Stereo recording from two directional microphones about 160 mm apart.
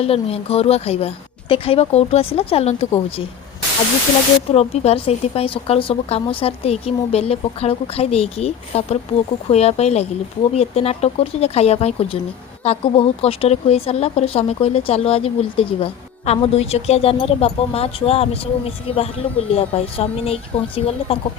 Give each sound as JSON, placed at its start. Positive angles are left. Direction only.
{"t": 0.0, "sound": "a woman's voice", "side_deg": 40}
{"t": 4.5, "sound": "a woman's voice", "side_deg": 40}